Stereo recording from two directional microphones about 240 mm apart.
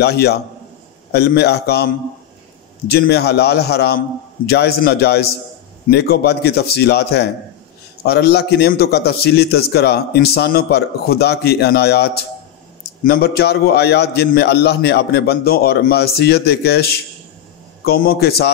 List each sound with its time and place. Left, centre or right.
0.0 s a man's voice: left
2.9 s a man's voice: left